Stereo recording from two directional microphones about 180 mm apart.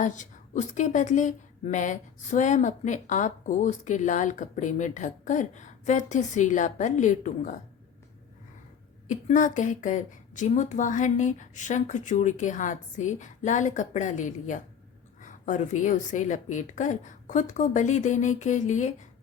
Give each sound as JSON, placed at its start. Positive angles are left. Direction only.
{"t": 0.0, "sound": "a woman's voice", "side_deg": 45}
{"t": 9.0, "sound": "a woman's voice", "side_deg": 45}